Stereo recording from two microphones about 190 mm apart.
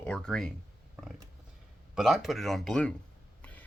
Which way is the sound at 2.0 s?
Centre (ahead or behind).